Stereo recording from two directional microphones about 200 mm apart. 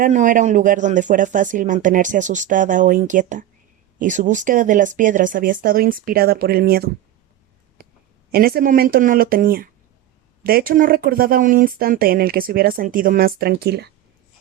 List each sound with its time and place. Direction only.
0.0 s speech: 40° right (ahead or behind)
8.3 s speech: 50° right (ahead or behind)